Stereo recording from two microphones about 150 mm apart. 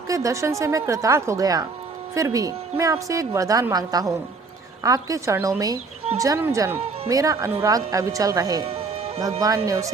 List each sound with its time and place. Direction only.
0.1 s a woman's voice: 20° right (ahead or behind)
8.6 s music: 40° right (ahead or behind)
9.6 s a woman's voice: 20° right (ahead or behind)